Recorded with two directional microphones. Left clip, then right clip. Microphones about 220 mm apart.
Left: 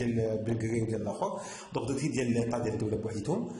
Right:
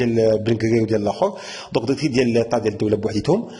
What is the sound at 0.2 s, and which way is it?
A man's voice, 35° right (ahead or behind).